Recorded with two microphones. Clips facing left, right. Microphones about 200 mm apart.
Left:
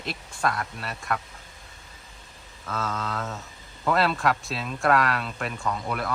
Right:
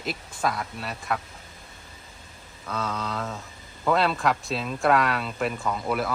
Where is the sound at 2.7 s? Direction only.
Centre (ahead or behind).